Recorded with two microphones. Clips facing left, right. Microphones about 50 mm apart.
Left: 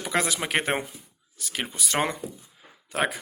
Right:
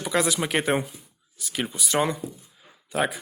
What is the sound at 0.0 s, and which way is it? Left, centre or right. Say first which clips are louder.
Speech: right 2 dB; left.